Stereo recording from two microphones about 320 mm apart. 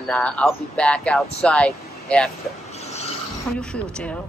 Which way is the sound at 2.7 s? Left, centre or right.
Centre.